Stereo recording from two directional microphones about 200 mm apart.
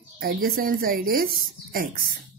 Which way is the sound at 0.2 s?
45° right (ahead or behind).